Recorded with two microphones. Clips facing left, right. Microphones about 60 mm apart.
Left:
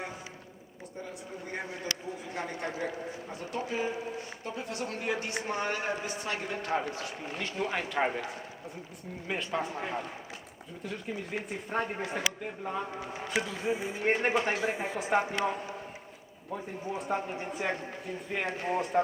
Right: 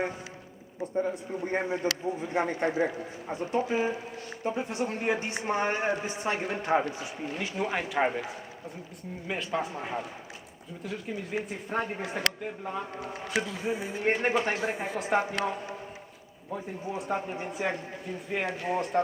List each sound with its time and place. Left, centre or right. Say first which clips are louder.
0.9 s a man's voice: right 11 dB; right
7.3 s speech: right 2 dB; centre
13.7 s a man's voice: even; right
14.0 s speech: right 2 dB; centre
14.6 s a man's voice: even; centre
14.9 s speech: right 2 dB; centre
18.4 s speech: right 1 dB; left
18.7 s speech: even; centre